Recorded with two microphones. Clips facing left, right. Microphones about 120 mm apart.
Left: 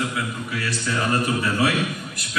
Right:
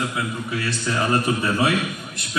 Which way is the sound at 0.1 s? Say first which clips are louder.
Right 2 dB; 25° right (ahead or behind).